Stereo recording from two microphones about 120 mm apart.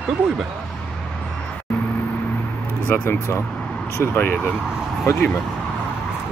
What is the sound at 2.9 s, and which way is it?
Speech, 20° left (ahead or behind).